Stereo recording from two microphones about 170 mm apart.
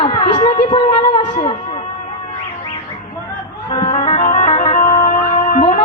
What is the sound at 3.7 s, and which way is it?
Music, 40° left (ahead or behind).